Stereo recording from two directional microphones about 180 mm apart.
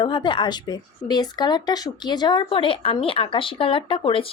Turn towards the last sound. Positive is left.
turn(degrees=30)  # may be behind; listen again after turning